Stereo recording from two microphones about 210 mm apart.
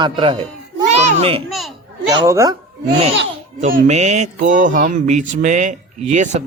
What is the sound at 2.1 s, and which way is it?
Speech, 15° right (ahead or behind).